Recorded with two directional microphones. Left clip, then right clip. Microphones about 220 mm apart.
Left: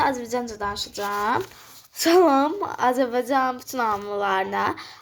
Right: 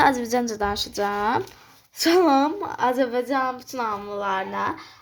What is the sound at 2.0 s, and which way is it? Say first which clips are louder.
A woman's voice: left 1 dB; 10° left (ahead or behind).